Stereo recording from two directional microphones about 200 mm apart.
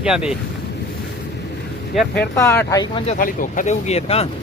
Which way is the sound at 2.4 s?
10° left (ahead or behind).